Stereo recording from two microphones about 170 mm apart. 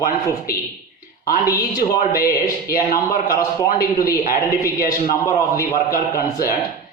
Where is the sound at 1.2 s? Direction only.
60° left (ahead or behind).